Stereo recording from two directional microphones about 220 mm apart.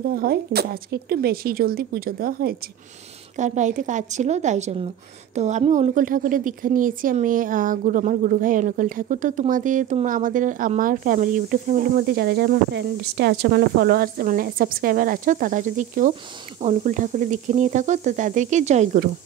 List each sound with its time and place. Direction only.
0.1 s a woman's voice: 45° right (ahead or behind)